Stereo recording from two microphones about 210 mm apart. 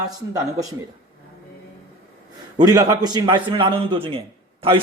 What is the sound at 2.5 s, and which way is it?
Speech, 20° right (ahead or behind).